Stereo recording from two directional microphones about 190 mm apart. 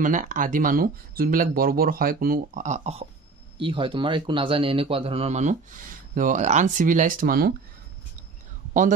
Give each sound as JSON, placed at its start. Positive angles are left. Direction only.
{"t": 0.0, "sound": "speech", "side_deg": -45}